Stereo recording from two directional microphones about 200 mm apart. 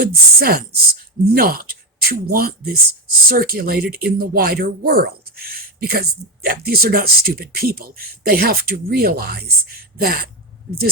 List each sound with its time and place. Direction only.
0.0 s speech: 50° right (ahead or behind)